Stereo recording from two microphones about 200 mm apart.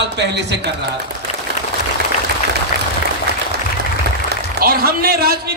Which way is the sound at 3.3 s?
55° right (ahead or behind).